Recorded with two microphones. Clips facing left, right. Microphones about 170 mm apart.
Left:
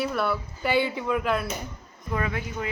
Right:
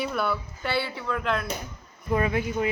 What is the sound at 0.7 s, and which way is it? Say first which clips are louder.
Speech: left 4 dB; 15° left (ahead or behind).